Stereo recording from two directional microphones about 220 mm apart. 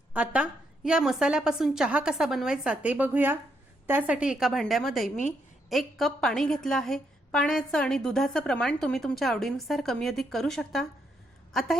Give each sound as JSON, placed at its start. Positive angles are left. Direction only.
{"t": 0.1, "sound": "a woman's voice", "side_deg": -5}